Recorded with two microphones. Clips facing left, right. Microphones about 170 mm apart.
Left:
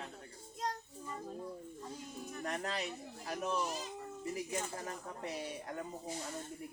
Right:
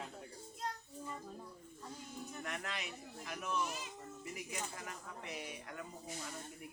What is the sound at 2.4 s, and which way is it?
Speech, 35° left (ahead or behind).